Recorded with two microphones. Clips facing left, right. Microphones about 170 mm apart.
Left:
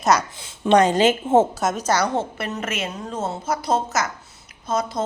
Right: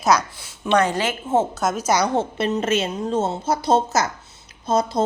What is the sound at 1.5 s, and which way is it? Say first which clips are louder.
Speech: even; centre (ahead or behind).